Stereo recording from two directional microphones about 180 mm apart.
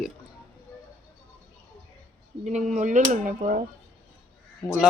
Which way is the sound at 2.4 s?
40° right (ahead or behind).